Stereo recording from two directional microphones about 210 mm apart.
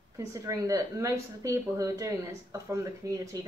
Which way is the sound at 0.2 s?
15° right (ahead or behind).